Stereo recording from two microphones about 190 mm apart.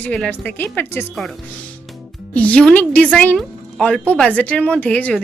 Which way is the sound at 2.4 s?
5° left (ahead or behind).